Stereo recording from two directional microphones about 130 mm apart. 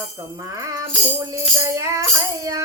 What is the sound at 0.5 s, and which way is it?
Music, 25° right (ahead or behind).